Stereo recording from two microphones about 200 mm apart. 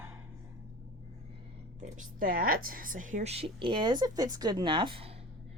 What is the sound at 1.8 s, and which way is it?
A woman's voice, 40° right (ahead or behind).